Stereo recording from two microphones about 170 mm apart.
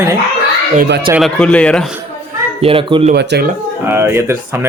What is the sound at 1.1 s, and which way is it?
Speech, centre (ahead or behind).